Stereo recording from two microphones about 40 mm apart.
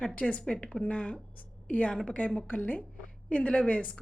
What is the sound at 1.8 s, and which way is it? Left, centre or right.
Speech, left.